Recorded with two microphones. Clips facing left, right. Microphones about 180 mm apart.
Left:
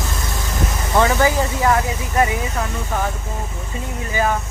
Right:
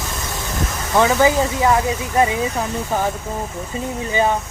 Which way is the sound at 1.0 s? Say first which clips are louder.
Right 2 dB; 15° right (ahead or behind).